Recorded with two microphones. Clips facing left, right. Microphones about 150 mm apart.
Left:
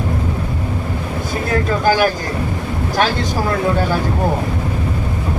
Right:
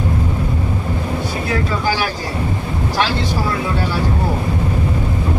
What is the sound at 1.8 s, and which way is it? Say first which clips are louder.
Vehicle: left 5 dB; 50° left (ahead or behind).